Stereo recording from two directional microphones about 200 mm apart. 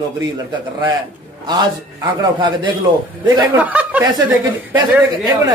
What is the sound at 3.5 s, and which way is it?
Speech, 5° right (ahead or behind).